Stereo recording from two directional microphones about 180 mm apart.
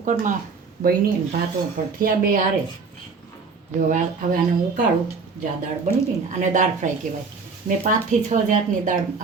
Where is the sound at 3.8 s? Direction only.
45° right (ahead or behind).